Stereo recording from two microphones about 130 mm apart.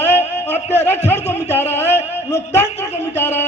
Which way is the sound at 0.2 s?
55° left (ahead or behind).